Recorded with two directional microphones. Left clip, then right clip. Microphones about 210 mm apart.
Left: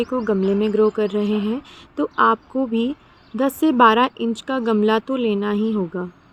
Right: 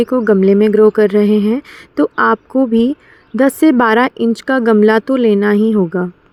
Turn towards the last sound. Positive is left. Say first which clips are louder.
# right 9 dB
turn(degrees=-30)  # may be behind; listen again after turning